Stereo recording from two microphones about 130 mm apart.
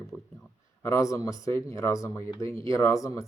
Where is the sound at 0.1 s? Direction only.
20° left (ahead or behind).